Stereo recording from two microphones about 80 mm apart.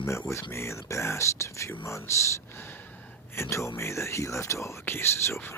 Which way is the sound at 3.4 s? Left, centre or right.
Left.